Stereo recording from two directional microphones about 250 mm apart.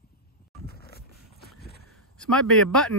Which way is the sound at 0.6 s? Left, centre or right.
Left.